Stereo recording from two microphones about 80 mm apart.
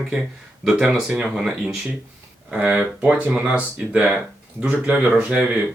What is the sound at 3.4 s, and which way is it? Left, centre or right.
Speech, centre.